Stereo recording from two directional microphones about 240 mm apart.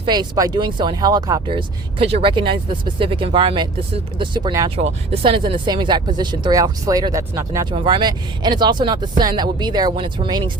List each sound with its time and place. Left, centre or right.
0.0 s speech: centre